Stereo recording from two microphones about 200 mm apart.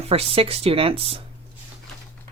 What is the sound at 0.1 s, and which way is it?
Speech, 30° right (ahead or behind).